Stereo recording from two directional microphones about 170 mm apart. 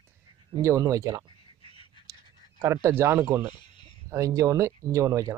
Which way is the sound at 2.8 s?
15° right (ahead or behind).